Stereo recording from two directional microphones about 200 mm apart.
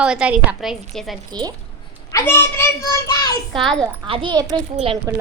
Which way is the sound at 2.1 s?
10° left (ahead or behind).